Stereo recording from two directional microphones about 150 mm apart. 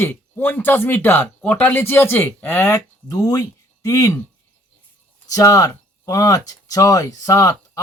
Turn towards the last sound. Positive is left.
turn(degrees=20)  # may be behind; listen again after turning